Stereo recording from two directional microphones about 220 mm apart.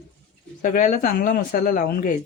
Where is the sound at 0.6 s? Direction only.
35° left (ahead or behind).